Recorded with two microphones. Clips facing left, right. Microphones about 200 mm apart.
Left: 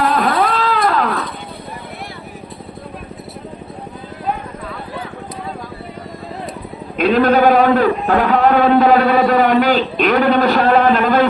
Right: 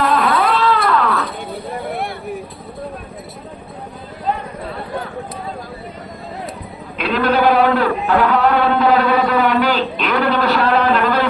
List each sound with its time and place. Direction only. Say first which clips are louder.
0.2 s cat: even; 45° left (ahead or behind)
6.9 s sheep: left 5 dB; 45° left (ahead or behind)
8.0 s a man's voice: left 1 dB; 45° left (ahead or behind)